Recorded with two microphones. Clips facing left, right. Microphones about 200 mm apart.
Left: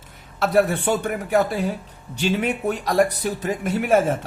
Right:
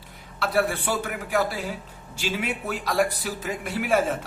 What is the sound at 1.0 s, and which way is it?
Speech, 40° left (ahead or behind).